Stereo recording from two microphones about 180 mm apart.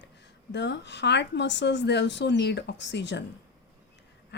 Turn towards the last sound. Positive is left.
turn(degrees=75)  # may be behind; listen again after turning